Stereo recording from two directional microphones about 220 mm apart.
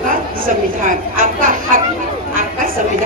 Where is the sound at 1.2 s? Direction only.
40° right (ahead or behind).